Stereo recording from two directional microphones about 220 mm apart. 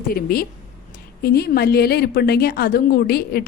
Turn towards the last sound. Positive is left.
turn(degrees=45)  # may be behind; listen again after turning